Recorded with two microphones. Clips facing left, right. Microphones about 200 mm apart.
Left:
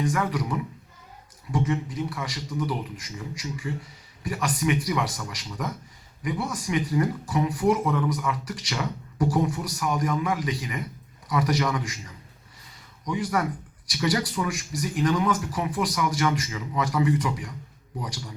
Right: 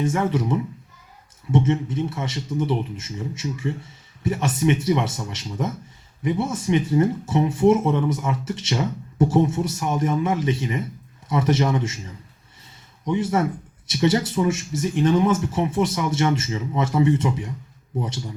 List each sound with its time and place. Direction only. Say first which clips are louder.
0.0 s speech: right 4 dB; 25° right (ahead or behind)